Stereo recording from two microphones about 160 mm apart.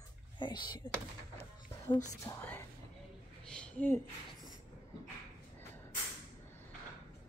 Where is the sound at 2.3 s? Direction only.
15° left (ahead or behind).